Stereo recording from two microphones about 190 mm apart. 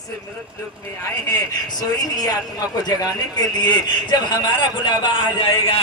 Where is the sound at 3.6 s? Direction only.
25° left (ahead or behind).